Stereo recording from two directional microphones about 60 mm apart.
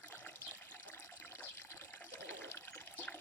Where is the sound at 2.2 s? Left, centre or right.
Left.